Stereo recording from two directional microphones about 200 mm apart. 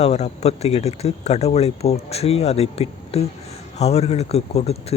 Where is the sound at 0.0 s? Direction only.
30° left (ahead or behind).